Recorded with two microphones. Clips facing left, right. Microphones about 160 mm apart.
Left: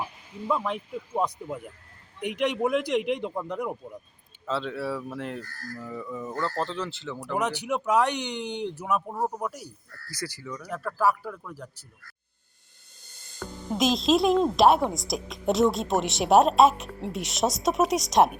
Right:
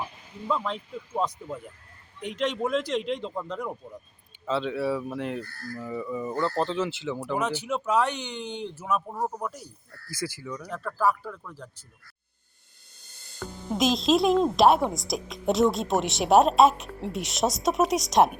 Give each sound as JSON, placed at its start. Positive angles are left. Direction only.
{"t": 0.4, "sound": "speech", "side_deg": 10}
{"t": 4.4, "sound": "speech", "side_deg": 0}
{"t": 7.3, "sound": "speech", "side_deg": 15}
{"t": 13.4, "sound": "speech", "side_deg": 0}